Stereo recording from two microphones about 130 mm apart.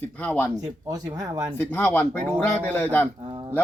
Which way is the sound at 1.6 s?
15° left (ahead or behind).